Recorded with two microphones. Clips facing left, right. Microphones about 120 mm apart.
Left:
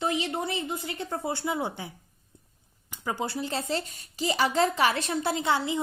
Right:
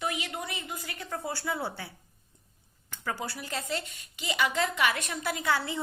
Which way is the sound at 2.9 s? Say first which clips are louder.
Left 4 dB; 20° left (ahead or behind).